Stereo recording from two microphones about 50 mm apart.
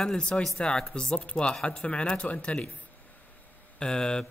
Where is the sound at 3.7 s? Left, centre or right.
Centre.